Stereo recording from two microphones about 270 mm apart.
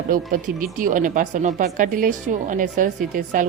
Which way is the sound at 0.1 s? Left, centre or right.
Right.